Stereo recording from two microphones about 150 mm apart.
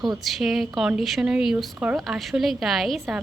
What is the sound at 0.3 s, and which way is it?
Speech, centre (ahead or behind).